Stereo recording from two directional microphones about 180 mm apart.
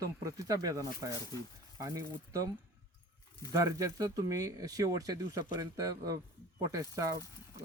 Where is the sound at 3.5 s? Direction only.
20° right (ahead or behind).